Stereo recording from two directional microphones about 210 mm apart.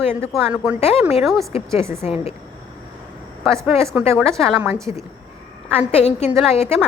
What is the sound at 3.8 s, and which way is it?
Speech, 10° right (ahead or behind).